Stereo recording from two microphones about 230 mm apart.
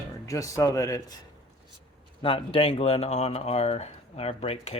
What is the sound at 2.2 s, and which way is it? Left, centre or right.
Speech, left.